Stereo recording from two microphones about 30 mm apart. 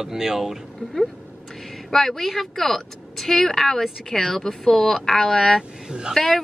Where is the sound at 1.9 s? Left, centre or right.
Centre.